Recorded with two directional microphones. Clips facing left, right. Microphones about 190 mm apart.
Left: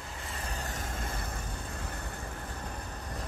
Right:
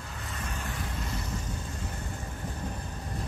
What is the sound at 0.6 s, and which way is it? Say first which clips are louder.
Vehicle: right 2 dB; 45° left (ahead or behind).